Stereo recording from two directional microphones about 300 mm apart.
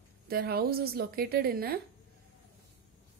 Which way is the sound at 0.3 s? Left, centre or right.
Right.